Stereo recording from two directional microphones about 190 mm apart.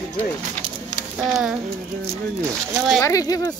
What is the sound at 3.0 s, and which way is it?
Speech, 20° left (ahead or behind).